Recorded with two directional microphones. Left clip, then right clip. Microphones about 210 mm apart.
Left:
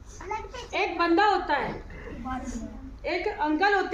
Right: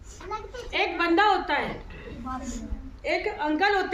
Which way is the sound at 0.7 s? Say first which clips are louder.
Even; 5° right (ahead or behind).